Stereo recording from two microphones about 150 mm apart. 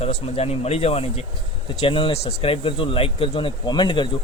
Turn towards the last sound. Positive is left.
turn(degrees=30)  # may be behind; listen again after turning